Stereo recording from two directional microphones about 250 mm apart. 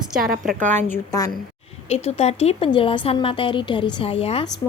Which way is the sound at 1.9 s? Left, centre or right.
Left.